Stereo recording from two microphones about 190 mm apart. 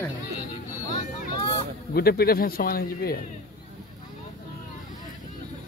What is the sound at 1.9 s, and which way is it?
A man's voice, 55° left (ahead or behind).